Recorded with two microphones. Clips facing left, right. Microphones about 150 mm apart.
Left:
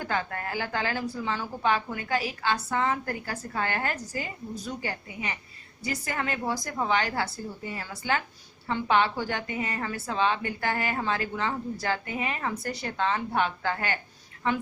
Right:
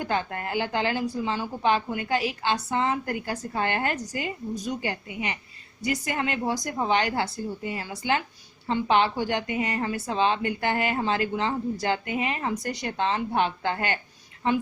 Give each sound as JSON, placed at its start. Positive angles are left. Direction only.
{"t": 0.0, "sound": "a woman's voice", "side_deg": -20}